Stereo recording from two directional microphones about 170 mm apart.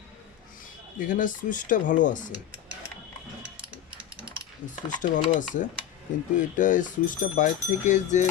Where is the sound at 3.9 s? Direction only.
30° right (ahead or behind).